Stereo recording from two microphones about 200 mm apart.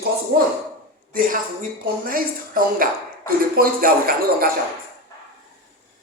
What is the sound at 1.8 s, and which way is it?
Speech, 45° right (ahead or behind).